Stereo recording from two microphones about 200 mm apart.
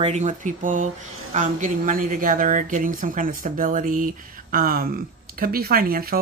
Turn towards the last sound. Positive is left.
turn(degrees=-45)  # may be behind; listen again after turning